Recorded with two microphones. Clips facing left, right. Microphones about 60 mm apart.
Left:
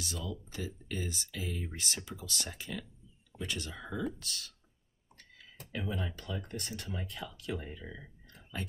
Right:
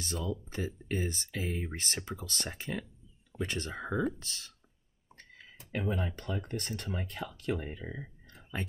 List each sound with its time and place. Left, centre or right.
0.0 s speech: right
5.1 s a sound: right
5.7 s speech: right